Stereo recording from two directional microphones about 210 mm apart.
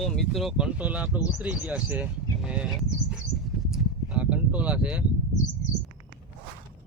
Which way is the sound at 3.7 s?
5° right (ahead or behind).